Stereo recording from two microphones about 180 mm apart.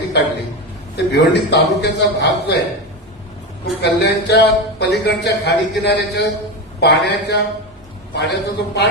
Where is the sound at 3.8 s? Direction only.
70° left (ahead or behind).